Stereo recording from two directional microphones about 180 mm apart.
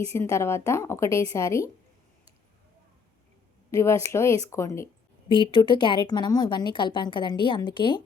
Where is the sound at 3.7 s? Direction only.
15° left (ahead or behind).